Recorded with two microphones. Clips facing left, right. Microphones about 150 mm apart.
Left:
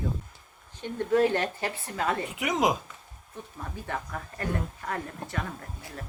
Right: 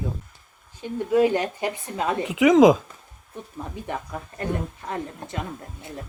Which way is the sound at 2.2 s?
90° right.